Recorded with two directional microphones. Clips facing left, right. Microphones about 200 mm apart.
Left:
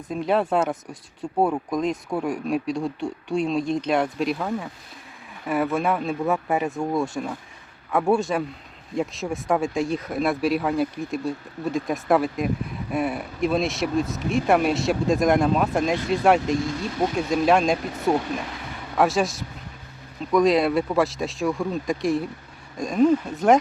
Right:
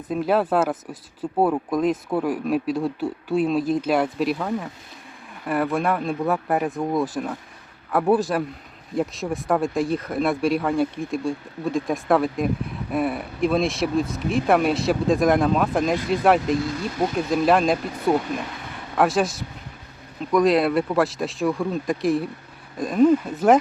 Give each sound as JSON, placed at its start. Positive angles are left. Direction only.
{"t": 0.1, "sound": "speech", "side_deg": -5}
{"t": 5.7, "sound": "speech", "side_deg": 0}